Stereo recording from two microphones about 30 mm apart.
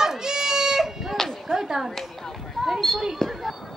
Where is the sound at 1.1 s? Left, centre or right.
Centre.